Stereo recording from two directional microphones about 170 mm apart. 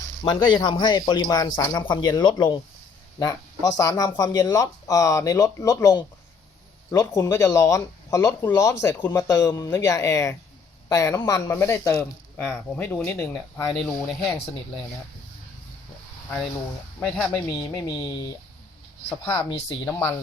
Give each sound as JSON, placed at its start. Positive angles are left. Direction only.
{"t": 0.2, "sound": "speech", "side_deg": 25}
{"t": 13.7, "sound": "speech", "side_deg": 0}
{"t": 17.0, "sound": "speech", "side_deg": 5}
{"t": 17.8, "sound": "speech", "side_deg": 25}
{"t": 19.0, "sound": "speech", "side_deg": 10}
{"t": 19.6, "sound": "speech", "side_deg": 20}